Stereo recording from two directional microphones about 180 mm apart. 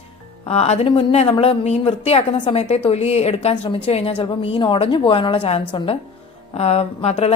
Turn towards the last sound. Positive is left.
turn(degrees=35)  # may be behind; listen again after turning